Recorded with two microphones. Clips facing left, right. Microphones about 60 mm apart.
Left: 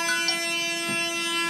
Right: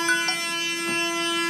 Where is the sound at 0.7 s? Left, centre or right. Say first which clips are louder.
Right 3 dB; right.